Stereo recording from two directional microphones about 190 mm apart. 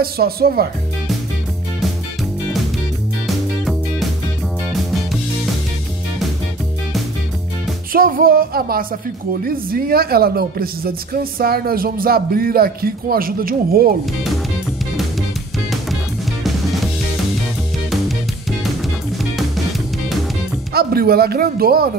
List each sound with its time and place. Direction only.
0.0 s speech: 55° right (ahead or behind)
3.3 s music: centre (ahead or behind)
7.9 s speech: 50° right (ahead or behind)
20.7 s speech: 55° right (ahead or behind)